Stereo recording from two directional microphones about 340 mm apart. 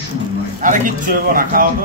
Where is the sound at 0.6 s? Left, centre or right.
Right.